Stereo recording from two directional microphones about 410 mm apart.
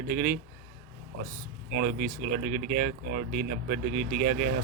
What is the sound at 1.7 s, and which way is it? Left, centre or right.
Speech, right.